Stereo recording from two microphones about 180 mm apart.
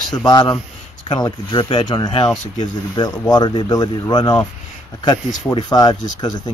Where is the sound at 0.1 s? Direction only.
20° left (ahead or behind).